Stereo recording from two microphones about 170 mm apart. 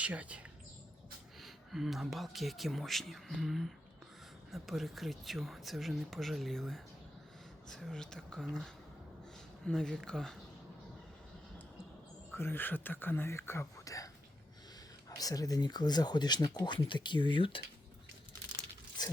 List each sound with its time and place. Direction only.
0.0 s speech: 10° right (ahead or behind)
12.3 s speech: 15° left (ahead or behind)
15.1 s speech: 20° left (ahead or behind)
19.0 s crunch: 25° left (ahead or behind)